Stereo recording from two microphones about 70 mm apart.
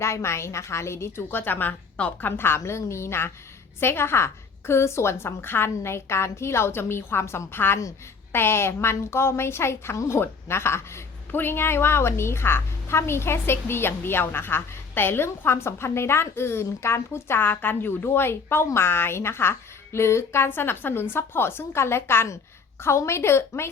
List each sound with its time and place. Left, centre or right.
0.0 s a woman's voice: left
7.8 s a woman's voice: left
8.4 s a woman's voice: left